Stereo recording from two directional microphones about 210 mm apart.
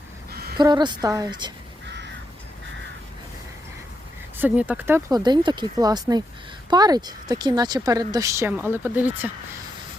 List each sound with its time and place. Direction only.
0.3 s a sound: 50° right (ahead or behind)
0.5 s a woman's voice: 20° right (ahead or behind)
4.4 s a woman's voice: 10° right (ahead or behind)